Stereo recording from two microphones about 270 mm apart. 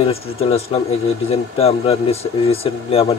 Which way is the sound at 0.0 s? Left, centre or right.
Left.